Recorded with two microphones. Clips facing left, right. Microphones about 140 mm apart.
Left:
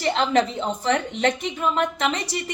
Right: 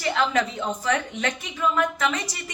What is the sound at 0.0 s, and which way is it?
A woman's voice, 25° left (ahead or behind).